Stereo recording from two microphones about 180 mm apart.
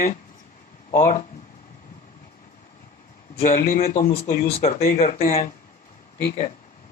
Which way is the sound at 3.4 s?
50° left (ahead or behind).